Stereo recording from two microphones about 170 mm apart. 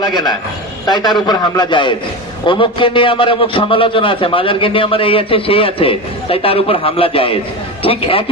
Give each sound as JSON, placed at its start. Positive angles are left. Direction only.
{"t": 0.0, "sound": "a man's voice", "side_deg": 25}